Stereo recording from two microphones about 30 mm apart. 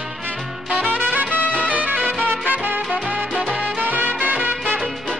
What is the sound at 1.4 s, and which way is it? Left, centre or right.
Music, left.